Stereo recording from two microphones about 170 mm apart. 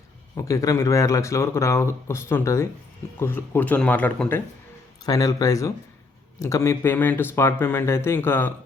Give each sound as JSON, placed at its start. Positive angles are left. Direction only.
{"t": 0.3, "sound": "speech", "side_deg": 20}
{"t": 5.0, "sound": "speech", "side_deg": 20}